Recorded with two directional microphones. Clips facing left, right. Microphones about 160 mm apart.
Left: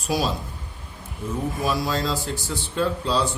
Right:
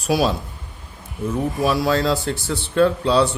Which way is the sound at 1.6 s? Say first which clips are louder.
Right 7 dB; 65° right (ahead or behind).